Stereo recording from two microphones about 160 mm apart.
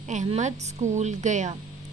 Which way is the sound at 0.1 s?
50° right (ahead or behind).